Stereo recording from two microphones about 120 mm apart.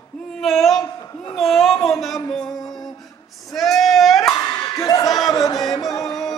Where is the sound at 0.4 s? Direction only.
Centre (ahead or behind).